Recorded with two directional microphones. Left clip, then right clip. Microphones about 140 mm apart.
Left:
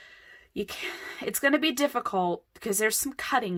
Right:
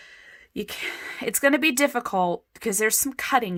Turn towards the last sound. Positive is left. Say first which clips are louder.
# right 4 dB
turn(degrees=-30)  # may be behind; listen again after turning